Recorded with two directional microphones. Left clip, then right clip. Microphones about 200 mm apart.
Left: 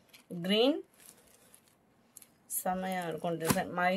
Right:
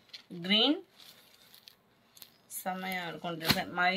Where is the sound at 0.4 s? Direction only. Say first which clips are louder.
Right 1 dB; 65° left (ahead or behind).